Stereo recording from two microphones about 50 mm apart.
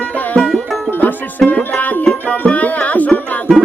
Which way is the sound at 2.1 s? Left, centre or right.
Left.